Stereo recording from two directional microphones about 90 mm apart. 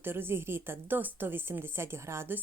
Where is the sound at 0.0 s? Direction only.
25° right (ahead or behind).